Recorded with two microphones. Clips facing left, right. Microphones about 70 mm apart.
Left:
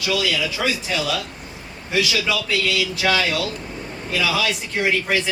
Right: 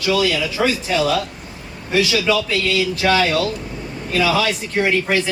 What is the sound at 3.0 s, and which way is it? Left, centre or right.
Speech, right.